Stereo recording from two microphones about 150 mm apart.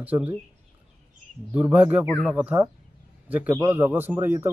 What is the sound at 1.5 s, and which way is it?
A man's voice, 10° right (ahead or behind).